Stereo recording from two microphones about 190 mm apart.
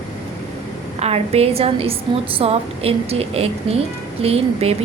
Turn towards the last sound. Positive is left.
turn(degrees=-30)  # may be behind; listen again after turning